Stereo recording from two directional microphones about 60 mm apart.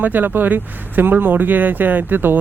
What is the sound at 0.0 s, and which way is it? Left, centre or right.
A man's voice, right.